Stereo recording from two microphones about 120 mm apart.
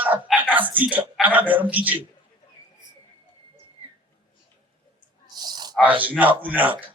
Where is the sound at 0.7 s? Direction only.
15° right (ahead or behind).